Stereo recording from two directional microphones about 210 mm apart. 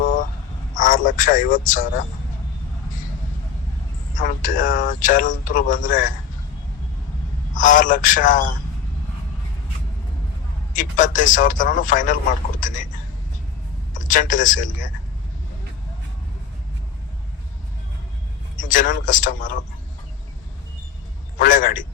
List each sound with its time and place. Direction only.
0.0 s a sound: 40° left (ahead or behind)
0.7 s speech: 40° left (ahead or behind)
4.1 s speech: 40° left (ahead or behind)
7.5 s speech: 40° left (ahead or behind)
10.8 s speech: 40° left (ahead or behind)
13.9 s speech: 40° left (ahead or behind)
18.7 s speech: 40° left (ahead or behind)
21.3 s speech: 40° left (ahead or behind)